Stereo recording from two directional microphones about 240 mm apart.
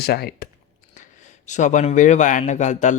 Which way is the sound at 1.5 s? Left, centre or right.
Left.